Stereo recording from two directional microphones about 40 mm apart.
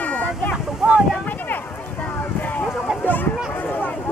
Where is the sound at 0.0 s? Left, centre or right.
Left.